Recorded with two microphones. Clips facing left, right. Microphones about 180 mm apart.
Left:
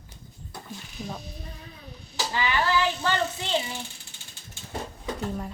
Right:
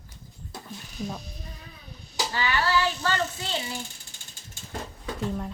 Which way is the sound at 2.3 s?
15° left (ahead or behind).